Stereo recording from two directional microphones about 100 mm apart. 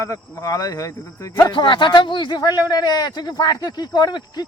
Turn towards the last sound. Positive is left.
turn(degrees=45)  # may be behind; listen again after turning